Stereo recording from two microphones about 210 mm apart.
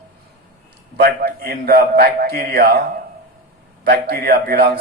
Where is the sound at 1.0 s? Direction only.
50° right (ahead or behind).